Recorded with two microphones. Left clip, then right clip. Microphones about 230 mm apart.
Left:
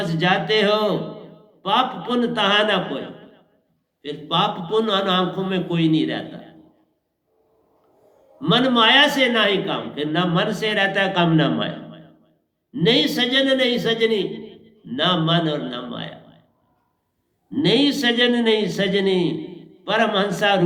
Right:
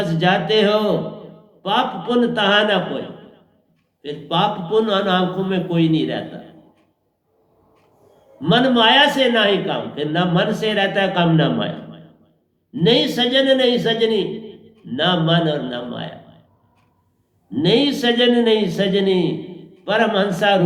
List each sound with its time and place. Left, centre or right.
0.0 s a man's voice: left
8.4 s a man's voice: left
17.5 s a man's voice: left